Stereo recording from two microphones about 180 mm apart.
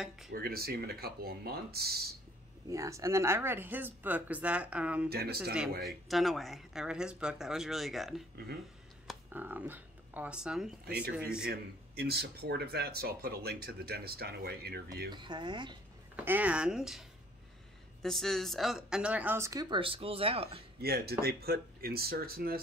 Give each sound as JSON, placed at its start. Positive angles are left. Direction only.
{"t": 0.3, "sound": "speech", "side_deg": -60}
{"t": 2.7, "sound": "speech", "side_deg": -15}
{"t": 5.1, "sound": "speech", "side_deg": -60}
{"t": 6.0, "sound": "speech", "side_deg": 0}
{"t": 11.4, "sound": "speech", "side_deg": -60}
{"t": 15.0, "sound": "speech", "side_deg": -25}
{"t": 16.3, "sound": "speech", "side_deg": -10}
{"t": 18.0, "sound": "speech", "side_deg": 0}
{"t": 20.8, "sound": "speech", "side_deg": -60}